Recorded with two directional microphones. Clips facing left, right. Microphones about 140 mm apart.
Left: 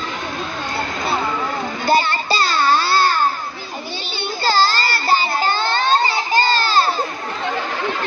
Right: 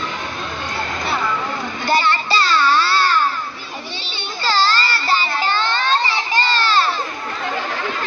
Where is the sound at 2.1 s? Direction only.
40° left (ahead or behind).